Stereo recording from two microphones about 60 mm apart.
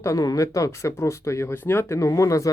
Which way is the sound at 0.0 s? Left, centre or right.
Left.